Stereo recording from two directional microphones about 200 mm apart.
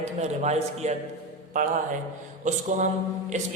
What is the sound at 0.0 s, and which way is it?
Speech, 35° right (ahead or behind).